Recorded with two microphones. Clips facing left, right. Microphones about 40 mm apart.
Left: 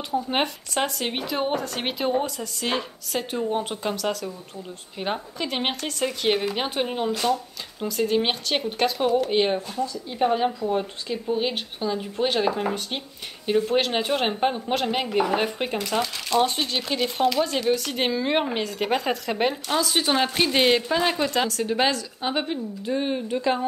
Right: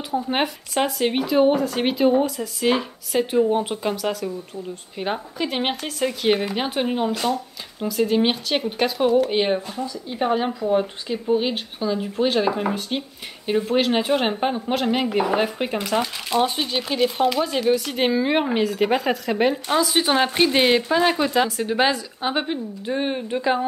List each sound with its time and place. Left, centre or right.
0.1 s speech: centre
15.9 s speech: centre
19.7 s a woman's voice: centre
22.8 s speech: right